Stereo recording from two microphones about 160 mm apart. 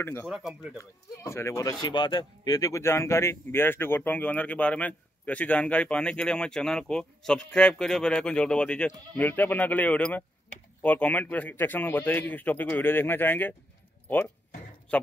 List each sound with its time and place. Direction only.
0.0 s speech: 15° left (ahead or behind)
0.3 s speech: centre (ahead or behind)
0.7 s a man's voice: 15° left (ahead or behind)